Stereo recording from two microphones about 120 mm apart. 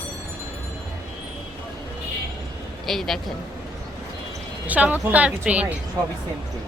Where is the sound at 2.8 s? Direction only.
5° left (ahead or behind).